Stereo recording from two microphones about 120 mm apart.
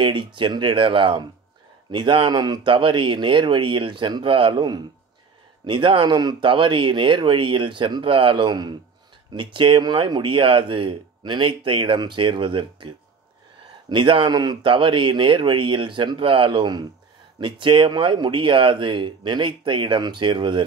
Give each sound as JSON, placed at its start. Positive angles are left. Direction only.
{"t": 0.0, "sound": "speech", "side_deg": -45}